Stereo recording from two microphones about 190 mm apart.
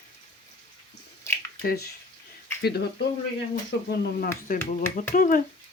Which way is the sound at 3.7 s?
55° left (ahead or behind).